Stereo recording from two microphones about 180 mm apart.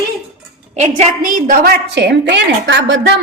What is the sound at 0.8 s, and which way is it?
A woman's voice, 45° right (ahead or behind).